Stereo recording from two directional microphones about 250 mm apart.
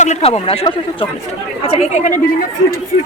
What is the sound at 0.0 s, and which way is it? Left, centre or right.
A woman's voice, left.